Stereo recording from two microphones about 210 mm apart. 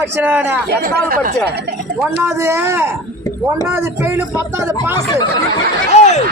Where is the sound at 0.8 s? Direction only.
45° right (ahead or behind).